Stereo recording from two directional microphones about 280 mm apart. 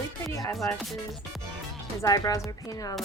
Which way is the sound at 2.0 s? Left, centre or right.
Centre.